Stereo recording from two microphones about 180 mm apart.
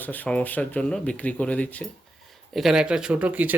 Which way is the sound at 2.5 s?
5° right (ahead or behind).